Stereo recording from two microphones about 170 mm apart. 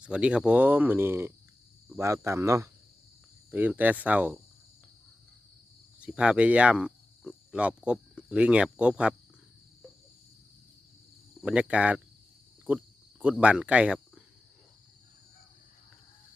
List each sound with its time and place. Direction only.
0.0 s speech: 5° right (ahead or behind)
6.0 s speech: 5° right (ahead or behind)
11.3 s speech: 5° right (ahead or behind)
12.6 s cricket: 10° right (ahead or behind)